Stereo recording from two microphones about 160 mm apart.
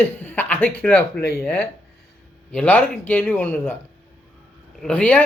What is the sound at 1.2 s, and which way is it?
Speech, 90° left.